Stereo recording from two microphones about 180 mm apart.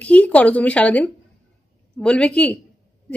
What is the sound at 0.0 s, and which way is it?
A woman's voice, 10° left (ahead or behind).